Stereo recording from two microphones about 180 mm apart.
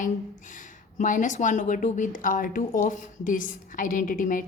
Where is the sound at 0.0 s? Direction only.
45° left (ahead or behind).